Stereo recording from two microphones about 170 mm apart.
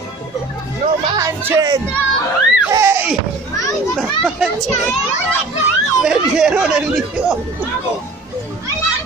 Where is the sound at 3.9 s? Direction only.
Centre (ahead or behind).